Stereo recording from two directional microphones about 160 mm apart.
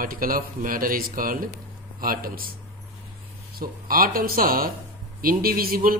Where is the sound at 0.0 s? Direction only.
60° right (ahead or behind).